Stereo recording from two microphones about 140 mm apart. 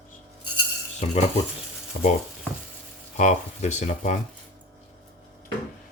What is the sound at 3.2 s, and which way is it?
Speech, 60° left (ahead or behind).